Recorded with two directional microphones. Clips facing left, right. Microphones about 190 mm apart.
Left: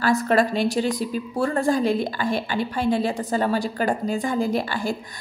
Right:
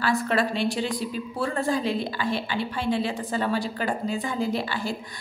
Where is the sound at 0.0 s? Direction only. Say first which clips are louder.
Left 4 dB; 45° left (ahead or behind).